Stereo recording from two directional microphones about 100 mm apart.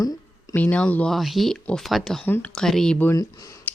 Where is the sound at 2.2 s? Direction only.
15° left (ahead or behind).